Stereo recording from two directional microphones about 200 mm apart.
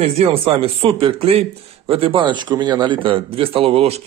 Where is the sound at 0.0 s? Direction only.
30° right (ahead or behind).